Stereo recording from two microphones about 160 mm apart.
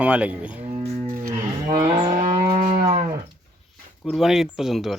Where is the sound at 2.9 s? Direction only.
30° right (ahead or behind).